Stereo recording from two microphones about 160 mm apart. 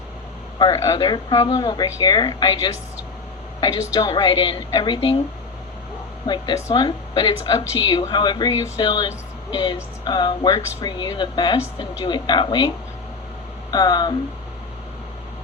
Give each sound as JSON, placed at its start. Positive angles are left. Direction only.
{"t": 0.6, "sound": "speech", "side_deg": 20}
{"t": 3.6, "sound": "speech", "side_deg": 25}
{"t": 6.2, "sound": "speech", "side_deg": 25}